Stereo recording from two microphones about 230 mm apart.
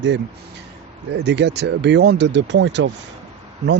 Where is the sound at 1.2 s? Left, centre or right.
Right.